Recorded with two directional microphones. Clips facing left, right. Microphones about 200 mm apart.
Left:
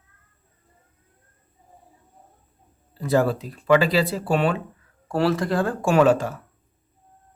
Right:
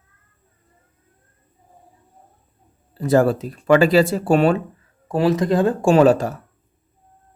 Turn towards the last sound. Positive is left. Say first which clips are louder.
# right 4 dB
turn(degrees=-40)  # may be behind; listen again after turning